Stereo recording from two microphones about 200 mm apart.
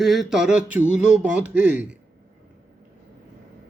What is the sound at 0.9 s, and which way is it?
Speech, 5° right (ahead or behind).